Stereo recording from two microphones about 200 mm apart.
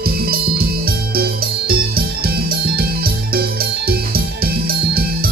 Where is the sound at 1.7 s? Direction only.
50° right (ahead or behind).